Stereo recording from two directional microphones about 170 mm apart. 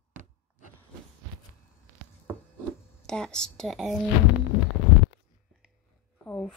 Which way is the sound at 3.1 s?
5° left (ahead or behind).